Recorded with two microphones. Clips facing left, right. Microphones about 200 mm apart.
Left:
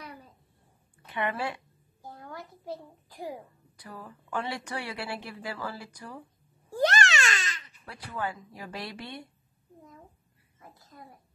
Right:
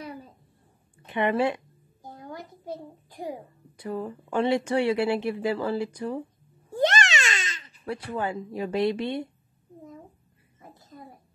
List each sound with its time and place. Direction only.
1.0 s a child's voice: 20° right (ahead or behind)
6.7 s baby cry: 20° right (ahead or behind)
10.6 s a sound: 25° right (ahead or behind)